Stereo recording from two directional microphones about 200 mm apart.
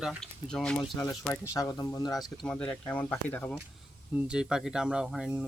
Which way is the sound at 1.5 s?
15° left (ahead or behind).